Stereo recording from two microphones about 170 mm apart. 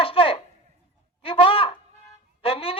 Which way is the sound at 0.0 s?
30° left (ahead or behind).